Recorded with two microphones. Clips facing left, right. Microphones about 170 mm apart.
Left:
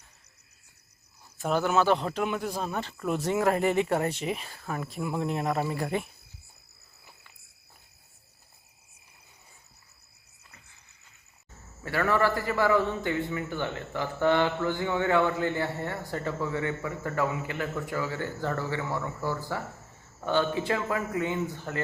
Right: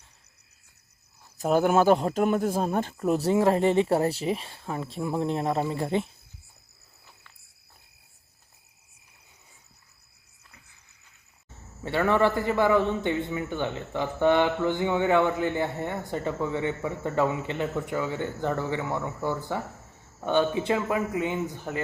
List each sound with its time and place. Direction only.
1.4 s speech: 45° right (ahead or behind); by 6.1 s 25° right (ahead or behind)
11.8 s a man's voice: 20° right (ahead or behind)